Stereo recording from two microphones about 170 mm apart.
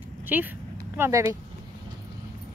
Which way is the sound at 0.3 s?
10° right (ahead or behind).